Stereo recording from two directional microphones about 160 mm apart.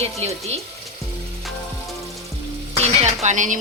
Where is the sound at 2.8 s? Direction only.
45° right (ahead or behind).